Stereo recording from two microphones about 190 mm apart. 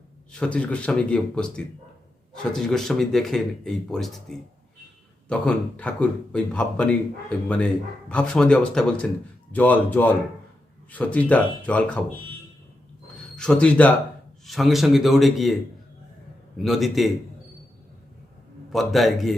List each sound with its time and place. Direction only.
0.3 s a man's voice: 5° left (ahead or behind)
13.3 s a man's voice: 5° left (ahead or behind)
16.6 s speech: centre (ahead or behind)
18.7 s speech: centre (ahead or behind)